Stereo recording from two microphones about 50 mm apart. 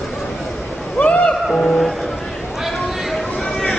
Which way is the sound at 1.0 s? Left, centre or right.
Left.